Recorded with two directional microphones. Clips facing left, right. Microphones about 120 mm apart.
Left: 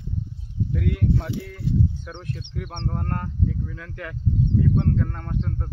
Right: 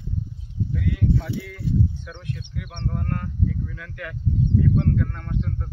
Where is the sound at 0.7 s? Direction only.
55° left (ahead or behind).